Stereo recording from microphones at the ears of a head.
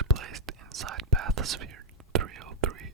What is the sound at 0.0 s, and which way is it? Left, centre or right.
Whispering, right.